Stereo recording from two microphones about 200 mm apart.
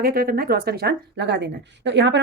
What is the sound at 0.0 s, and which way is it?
Speech, 50° right (ahead or behind).